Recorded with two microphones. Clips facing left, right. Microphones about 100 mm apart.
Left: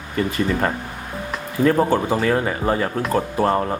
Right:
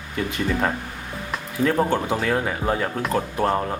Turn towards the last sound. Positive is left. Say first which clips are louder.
# left 3 dB
turn(degrees=0)  # may be behind; listen again after turning